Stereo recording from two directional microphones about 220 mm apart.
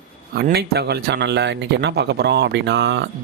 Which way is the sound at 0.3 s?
45° right (ahead or behind).